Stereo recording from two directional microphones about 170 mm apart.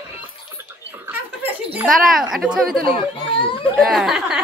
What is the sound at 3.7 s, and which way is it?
Speech, centre (ahead or behind).